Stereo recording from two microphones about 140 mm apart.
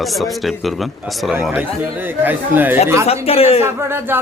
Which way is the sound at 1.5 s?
15° right (ahead or behind).